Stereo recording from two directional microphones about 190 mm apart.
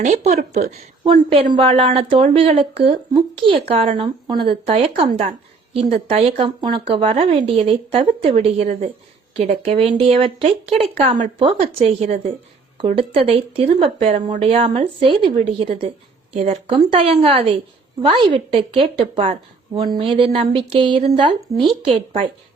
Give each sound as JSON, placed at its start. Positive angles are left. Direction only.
{"t": 0.0, "sound": "speech", "side_deg": -35}
{"t": 21.8, "sound": "speech", "side_deg": -40}